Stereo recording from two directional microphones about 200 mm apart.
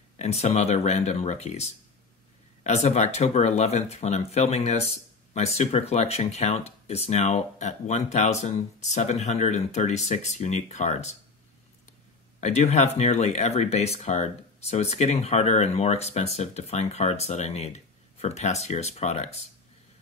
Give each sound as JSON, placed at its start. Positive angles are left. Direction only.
{"t": 0.2, "sound": "speech", "side_deg": 30}
{"t": 12.4, "sound": "speech", "side_deg": 35}